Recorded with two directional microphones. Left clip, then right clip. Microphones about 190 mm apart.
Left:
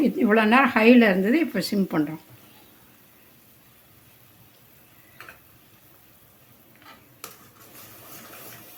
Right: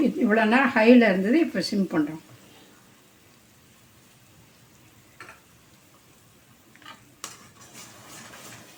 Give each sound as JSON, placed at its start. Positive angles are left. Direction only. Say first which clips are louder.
{"t": 0.0, "sound": "speech", "louder": "left 2 dB", "side_deg": 35}